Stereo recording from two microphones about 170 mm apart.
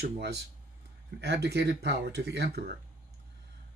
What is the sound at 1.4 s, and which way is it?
Speech, 75° right (ahead or behind).